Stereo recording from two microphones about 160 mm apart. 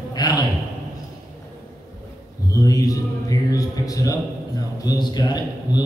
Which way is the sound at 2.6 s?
20° left (ahead or behind).